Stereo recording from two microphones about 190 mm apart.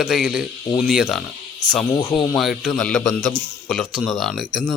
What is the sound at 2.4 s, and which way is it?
A man's voice, centre (ahead or behind).